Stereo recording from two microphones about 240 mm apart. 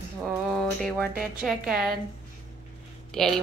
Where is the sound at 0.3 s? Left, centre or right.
Centre.